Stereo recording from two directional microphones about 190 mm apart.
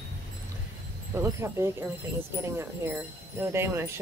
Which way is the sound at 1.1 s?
15° right (ahead or behind).